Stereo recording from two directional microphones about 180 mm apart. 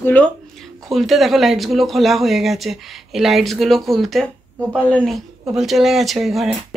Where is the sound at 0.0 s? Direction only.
10° left (ahead or behind).